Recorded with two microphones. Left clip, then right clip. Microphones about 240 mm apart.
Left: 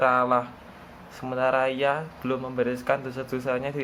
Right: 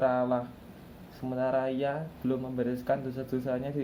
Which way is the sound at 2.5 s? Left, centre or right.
Centre.